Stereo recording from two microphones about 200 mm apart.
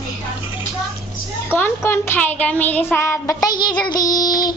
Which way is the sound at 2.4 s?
10° left (ahead or behind).